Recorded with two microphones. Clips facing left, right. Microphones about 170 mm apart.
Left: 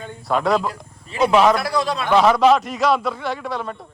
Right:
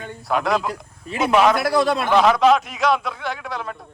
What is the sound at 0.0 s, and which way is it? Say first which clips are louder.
A man's voice: left 2 dB; centre (ahead or behind).